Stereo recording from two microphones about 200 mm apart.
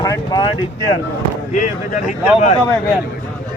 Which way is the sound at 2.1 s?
35° left (ahead or behind).